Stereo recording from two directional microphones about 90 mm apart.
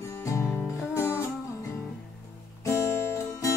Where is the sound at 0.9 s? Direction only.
30° left (ahead or behind).